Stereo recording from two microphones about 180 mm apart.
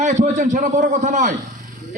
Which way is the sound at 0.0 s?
40° right (ahead or behind).